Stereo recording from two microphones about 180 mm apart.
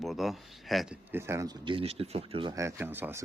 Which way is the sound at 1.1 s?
15° right (ahead or behind).